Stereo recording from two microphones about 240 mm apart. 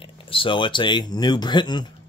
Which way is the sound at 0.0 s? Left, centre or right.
Left.